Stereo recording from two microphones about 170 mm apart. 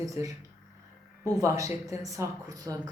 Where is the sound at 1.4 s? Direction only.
20° right (ahead or behind).